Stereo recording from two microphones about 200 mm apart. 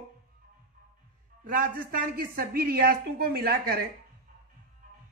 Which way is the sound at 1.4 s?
45° right (ahead or behind).